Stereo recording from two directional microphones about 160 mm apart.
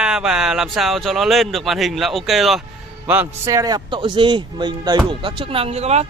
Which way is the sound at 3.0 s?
10° right (ahead or behind).